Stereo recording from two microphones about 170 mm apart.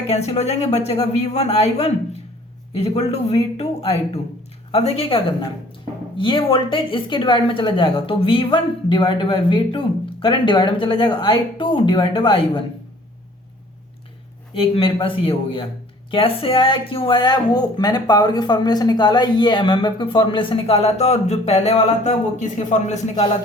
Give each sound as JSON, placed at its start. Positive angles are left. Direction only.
{"t": 0.1, "sound": "speech", "side_deg": 40}
{"t": 14.5, "sound": "speech", "side_deg": 30}